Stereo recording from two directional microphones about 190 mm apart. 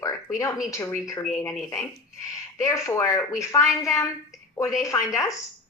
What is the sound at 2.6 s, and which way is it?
Speech, 15° left (ahead or behind).